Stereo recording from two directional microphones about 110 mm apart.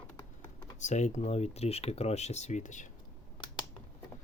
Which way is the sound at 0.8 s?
90° left.